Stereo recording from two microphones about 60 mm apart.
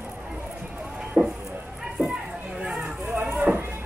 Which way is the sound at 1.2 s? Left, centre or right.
Right.